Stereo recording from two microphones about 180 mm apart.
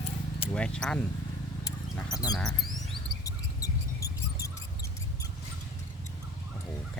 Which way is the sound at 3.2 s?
20° left (ahead or behind).